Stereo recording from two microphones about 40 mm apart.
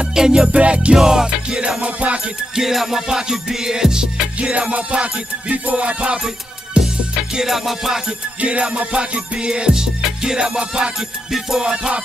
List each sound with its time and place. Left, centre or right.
0.0 s music: centre
0.5 s music: right
0.9 s music: centre
1.8 s music: right
2.5 s music: centre
4.4 s music: right
6.8 s music: centre
8.4 s music: right; by 11.9 s centre